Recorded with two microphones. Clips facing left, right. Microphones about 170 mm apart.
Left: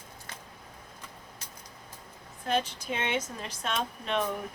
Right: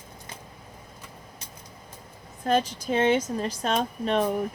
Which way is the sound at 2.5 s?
40° right (ahead or behind).